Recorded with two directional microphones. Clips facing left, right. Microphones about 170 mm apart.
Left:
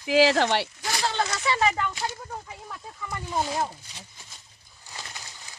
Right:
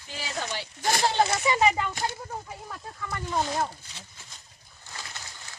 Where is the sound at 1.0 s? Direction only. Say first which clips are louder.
Right 2 dB; 20° right (ahead or behind).